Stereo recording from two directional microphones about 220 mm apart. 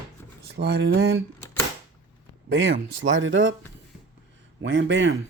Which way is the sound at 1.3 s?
10° left (ahead or behind).